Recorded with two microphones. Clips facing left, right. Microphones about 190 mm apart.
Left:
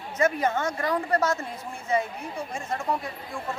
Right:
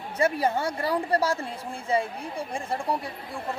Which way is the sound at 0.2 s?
35° right (ahead or behind).